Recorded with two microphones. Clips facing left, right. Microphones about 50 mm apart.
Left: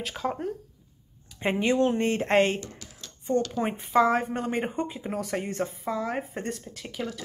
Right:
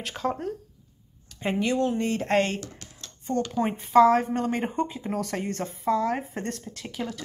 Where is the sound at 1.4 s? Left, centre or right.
Left.